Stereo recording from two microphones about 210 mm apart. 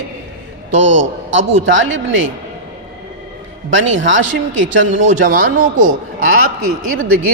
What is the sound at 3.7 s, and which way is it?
A man's voice, 65° right (ahead or behind).